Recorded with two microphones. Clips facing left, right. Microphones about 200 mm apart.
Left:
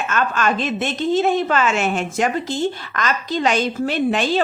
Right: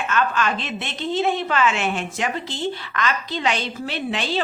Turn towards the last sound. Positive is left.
turn(degrees=45)  # may be behind; listen again after turning